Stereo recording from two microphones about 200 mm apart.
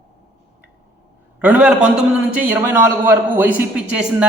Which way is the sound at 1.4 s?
5° right (ahead or behind).